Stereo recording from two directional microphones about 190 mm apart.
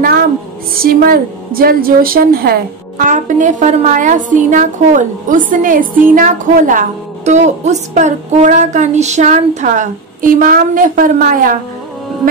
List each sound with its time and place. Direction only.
0.7 s a woman's voice: 50° right (ahead or behind)